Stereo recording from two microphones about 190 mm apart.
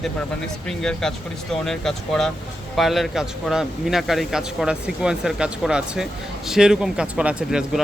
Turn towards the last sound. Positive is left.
turn(degrees=-5)  # may be behind; listen again after turning